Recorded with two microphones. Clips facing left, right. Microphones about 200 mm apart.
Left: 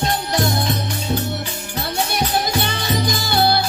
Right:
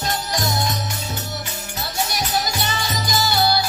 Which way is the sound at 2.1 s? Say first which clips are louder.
Left 4 dB; 55° left (ahead or behind).